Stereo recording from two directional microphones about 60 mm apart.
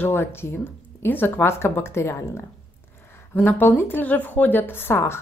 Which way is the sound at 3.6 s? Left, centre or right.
Left.